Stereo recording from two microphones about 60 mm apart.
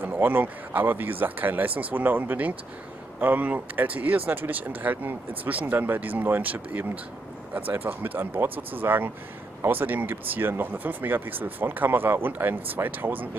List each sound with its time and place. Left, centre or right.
0.1 s speech: right